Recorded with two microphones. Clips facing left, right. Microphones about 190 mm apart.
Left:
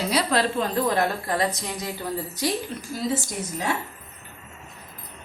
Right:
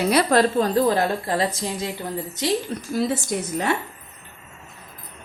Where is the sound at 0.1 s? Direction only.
50° right (ahead or behind).